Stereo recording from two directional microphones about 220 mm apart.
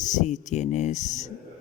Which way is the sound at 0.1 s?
35° left (ahead or behind).